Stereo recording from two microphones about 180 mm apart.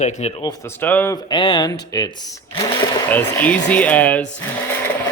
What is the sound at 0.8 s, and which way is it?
Speech, 10° left (ahead or behind).